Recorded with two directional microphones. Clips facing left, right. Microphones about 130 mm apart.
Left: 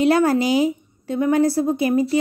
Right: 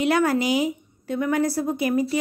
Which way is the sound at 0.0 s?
35° left (ahead or behind).